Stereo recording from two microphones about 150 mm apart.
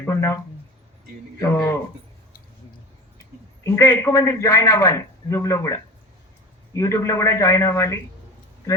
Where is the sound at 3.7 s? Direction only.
20° left (ahead or behind).